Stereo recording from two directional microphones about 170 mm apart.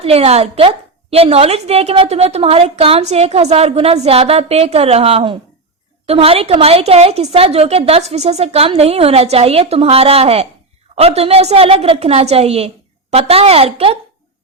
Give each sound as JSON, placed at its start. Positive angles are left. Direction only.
{"t": 0.0, "sound": "speech", "side_deg": -35}